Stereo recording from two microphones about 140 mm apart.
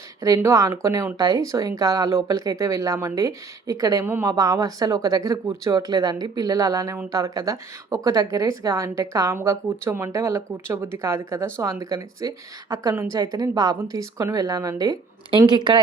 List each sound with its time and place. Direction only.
0.2 s a woman's voice: 25° right (ahead or behind)